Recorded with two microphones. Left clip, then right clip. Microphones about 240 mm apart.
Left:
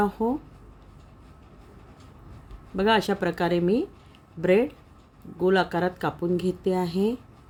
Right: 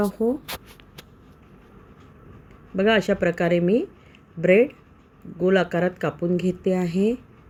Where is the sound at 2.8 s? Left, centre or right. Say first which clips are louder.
Right 3 dB; centre.